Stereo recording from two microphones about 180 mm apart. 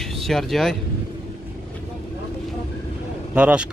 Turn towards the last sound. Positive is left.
turn(degrees=-5)  # may be behind; listen again after turning